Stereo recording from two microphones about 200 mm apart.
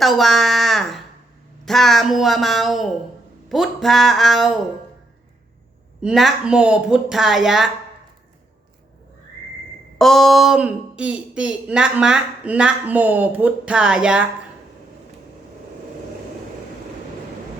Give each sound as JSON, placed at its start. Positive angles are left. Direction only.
{"t": 0.0, "sound": "a sound", "side_deg": 0}
{"t": 1.6, "sound": "speech", "side_deg": 0}
{"t": 6.0, "sound": "speech", "side_deg": -5}
{"t": 10.0, "sound": "speech", "side_deg": 0}